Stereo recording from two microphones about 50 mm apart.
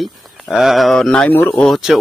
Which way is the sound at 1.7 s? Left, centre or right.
Centre.